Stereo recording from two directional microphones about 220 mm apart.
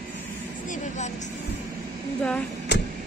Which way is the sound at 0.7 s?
35° left (ahead or behind).